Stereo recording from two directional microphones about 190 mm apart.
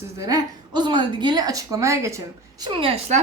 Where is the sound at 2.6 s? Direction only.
25° right (ahead or behind).